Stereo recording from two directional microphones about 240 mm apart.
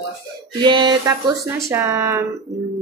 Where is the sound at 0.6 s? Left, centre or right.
Centre.